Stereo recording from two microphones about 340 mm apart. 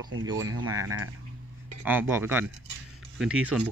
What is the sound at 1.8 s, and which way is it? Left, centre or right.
Speech, centre.